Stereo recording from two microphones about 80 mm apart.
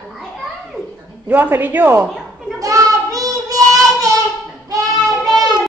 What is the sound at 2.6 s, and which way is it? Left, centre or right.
Child singing, right.